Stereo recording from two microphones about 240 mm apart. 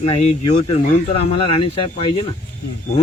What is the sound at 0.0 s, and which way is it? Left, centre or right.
Speech, left.